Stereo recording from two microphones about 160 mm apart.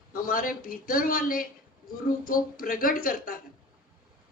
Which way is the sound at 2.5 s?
60° left (ahead or behind).